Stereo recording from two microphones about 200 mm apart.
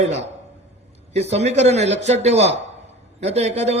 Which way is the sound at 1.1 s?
35° right (ahead or behind).